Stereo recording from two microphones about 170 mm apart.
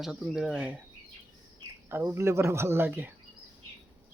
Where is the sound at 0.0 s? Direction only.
5° right (ahead or behind).